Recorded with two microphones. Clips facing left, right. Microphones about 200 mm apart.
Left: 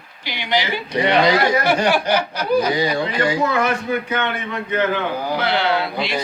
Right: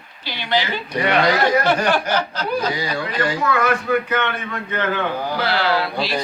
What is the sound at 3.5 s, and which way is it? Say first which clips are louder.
A man's voice: right 1 dB; 25° left (ahead or behind).